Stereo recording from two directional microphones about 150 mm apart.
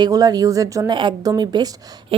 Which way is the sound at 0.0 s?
25° right (ahead or behind).